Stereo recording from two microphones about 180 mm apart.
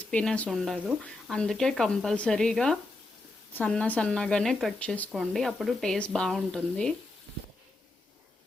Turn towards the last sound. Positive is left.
turn(degrees=5)  # may be behind; listen again after turning